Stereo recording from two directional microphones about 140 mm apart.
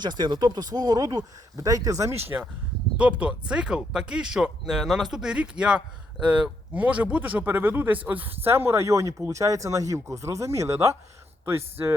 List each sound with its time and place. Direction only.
0.0 s a man's voice: 30° right (ahead or behind)